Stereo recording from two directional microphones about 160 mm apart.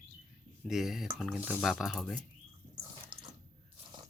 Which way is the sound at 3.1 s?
30° right (ahead or behind).